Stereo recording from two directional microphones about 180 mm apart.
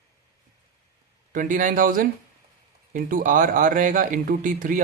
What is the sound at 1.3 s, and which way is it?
Speech, 50° right (ahead or behind).